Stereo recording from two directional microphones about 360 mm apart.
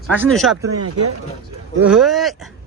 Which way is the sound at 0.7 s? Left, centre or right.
Right.